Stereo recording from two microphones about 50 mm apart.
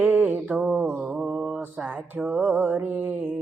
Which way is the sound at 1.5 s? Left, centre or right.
Right.